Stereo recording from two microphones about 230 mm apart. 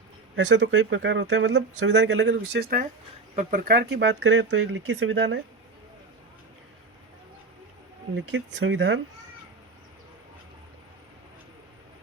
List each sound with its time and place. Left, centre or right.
0.3 s speech: right
8.1 s speech: right